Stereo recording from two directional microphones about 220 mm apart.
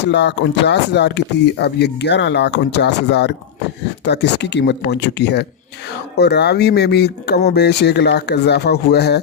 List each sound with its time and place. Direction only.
0.0 s speech: 50° left (ahead or behind)